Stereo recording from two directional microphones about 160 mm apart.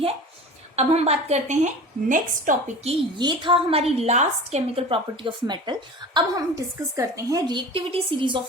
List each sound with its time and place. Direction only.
0.8 s a woman's voice: 40° right (ahead or behind)
3.2 s a woman's voice: 30° right (ahead or behind)